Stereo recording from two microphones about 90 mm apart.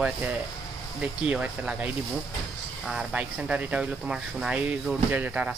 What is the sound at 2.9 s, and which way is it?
Speech, 10° right (ahead or behind).